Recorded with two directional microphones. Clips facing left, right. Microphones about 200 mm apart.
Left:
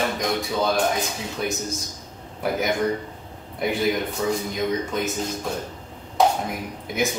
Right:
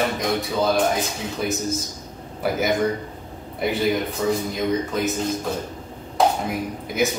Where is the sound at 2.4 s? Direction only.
Centre (ahead or behind).